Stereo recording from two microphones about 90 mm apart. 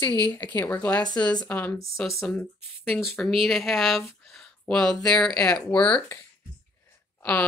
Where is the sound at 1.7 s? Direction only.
30° left (ahead or behind).